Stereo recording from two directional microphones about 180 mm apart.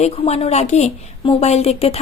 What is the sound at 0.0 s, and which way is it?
Speech, 35° left (ahead or behind).